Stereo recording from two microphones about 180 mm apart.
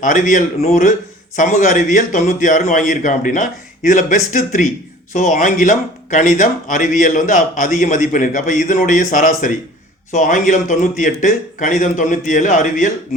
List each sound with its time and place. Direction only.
0.0 s speech: 45° left (ahead or behind)